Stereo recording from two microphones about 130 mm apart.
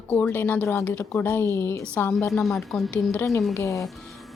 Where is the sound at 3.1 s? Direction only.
20° left (ahead or behind).